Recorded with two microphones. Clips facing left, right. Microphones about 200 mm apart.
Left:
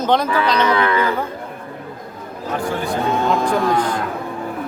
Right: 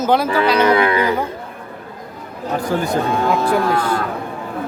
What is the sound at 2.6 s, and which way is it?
Speech, 45° right (ahead or behind).